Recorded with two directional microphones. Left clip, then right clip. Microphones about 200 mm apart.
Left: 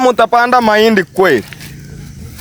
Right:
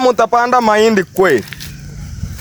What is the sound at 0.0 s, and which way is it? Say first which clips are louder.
Speech: left 2 dB; 15° left (ahead or behind).